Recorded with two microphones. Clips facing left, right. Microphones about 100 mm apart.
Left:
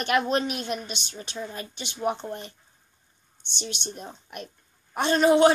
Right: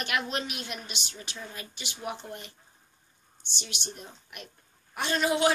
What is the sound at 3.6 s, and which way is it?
Speech, 35° left (ahead or behind).